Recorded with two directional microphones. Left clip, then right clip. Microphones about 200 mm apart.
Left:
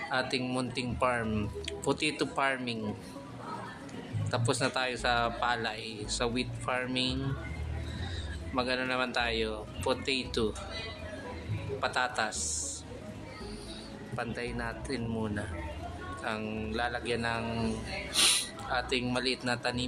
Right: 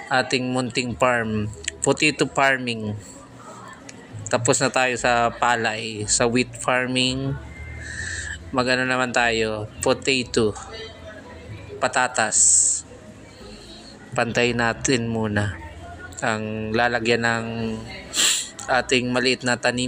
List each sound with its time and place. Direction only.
0.1 s speech: 25° right (ahead or behind)
4.3 s speech: 25° right (ahead or behind)
8.5 s speech: 30° right (ahead or behind)
11.8 s speech: 25° right (ahead or behind)
14.2 s a man's voice: 40° right (ahead or behind)
16.4 s speech: 20° right (ahead or behind)
16.7 s a man's voice: 30° right (ahead or behind)
17.5 s speech: 20° right (ahead or behind)
18.7 s speech: 30° right (ahead or behind)